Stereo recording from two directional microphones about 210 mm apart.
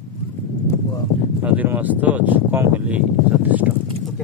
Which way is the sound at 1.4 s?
10° right (ahead or behind).